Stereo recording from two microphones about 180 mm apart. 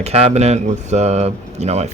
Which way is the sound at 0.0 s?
35° right (ahead or behind).